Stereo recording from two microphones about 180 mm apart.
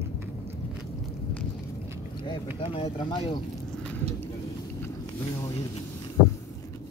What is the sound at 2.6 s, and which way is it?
Speech, 30° left (ahead or behind).